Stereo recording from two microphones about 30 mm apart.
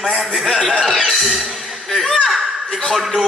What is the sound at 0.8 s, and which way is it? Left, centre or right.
Music, centre.